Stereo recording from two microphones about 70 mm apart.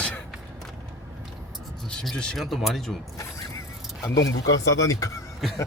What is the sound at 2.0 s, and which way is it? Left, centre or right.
Speech, centre.